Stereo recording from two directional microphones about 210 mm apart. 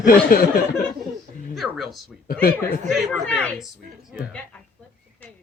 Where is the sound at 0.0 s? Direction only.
45° left (ahead or behind).